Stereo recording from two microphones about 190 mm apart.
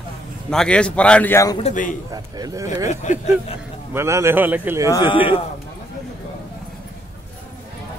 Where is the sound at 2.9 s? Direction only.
40° left (ahead or behind).